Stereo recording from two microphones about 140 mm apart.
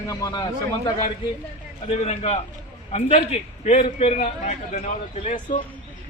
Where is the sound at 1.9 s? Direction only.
50° left (ahead or behind).